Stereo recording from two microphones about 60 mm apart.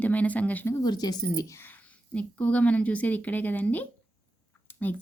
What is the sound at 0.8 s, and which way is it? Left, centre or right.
Speech, left.